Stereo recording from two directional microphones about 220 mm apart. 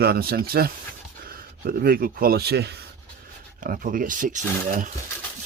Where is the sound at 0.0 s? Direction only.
45° right (ahead or behind).